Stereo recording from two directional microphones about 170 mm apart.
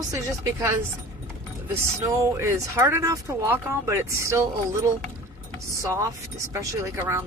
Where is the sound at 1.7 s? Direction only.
15° right (ahead or behind).